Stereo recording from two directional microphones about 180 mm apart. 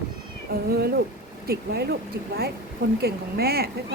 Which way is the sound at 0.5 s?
60° right (ahead or behind).